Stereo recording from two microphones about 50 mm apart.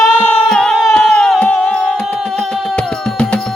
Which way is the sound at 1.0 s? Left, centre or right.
Centre.